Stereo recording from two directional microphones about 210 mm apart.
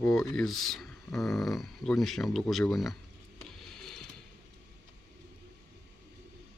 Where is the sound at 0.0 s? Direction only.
Centre (ahead or behind).